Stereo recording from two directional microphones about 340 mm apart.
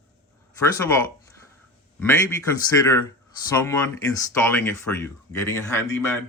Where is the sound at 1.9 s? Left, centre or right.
Centre.